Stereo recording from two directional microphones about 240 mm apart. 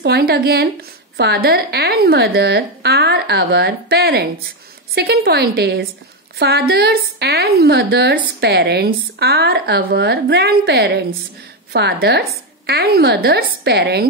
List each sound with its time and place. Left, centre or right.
0.0 s a woman's voice: right